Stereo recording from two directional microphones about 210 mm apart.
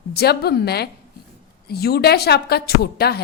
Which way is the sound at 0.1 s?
50° left (ahead or behind).